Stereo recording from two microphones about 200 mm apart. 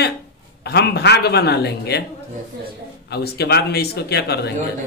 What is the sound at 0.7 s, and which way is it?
Speech, 55° left (ahead or behind).